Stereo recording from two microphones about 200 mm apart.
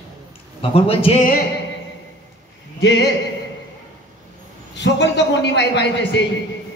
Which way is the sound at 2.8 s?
55° left (ahead or behind).